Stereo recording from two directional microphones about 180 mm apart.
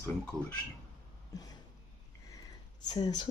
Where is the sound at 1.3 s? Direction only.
20° left (ahead or behind).